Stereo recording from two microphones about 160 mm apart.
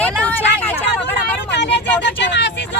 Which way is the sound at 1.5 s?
90° left.